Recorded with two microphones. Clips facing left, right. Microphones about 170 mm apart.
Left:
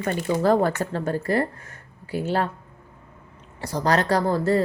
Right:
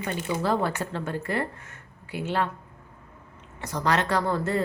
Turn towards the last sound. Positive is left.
turn(degrees=35)  # may be behind; listen again after turning